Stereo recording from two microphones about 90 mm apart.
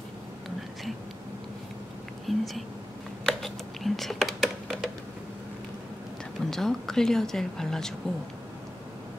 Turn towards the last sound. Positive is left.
turn(degrees=5)  # may be behind; listen again after turning